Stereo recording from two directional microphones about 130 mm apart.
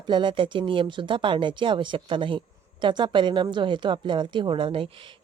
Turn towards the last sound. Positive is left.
turn(degrees=-40)  # may be behind; listen again after turning